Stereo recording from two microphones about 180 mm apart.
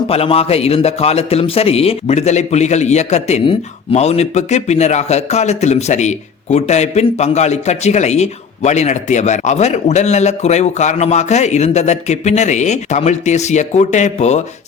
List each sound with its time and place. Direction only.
0.1 s a man's voice: 35° left (ahead or behind)